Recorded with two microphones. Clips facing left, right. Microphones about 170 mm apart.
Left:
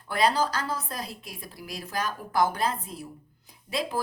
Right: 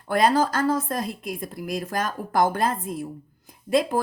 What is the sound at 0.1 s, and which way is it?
A woman's voice, 50° right (ahead or behind).